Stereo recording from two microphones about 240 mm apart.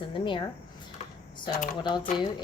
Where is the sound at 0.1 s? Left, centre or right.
Centre.